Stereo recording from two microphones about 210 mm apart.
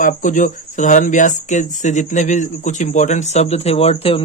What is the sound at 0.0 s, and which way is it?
Speech, 40° left (ahead or behind).